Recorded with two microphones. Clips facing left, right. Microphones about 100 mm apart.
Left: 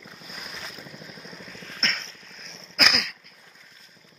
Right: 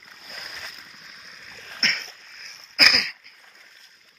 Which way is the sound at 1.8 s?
30° left (ahead or behind).